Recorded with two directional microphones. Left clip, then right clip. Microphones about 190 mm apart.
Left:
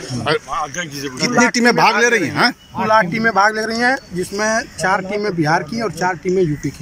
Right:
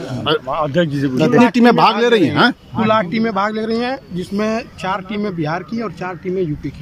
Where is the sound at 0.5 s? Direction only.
55° right (ahead or behind).